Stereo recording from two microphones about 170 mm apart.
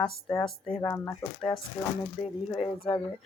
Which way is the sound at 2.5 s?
30° left (ahead or behind).